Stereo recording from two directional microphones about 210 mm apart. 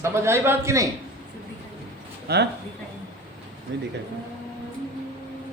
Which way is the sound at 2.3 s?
50° right (ahead or behind).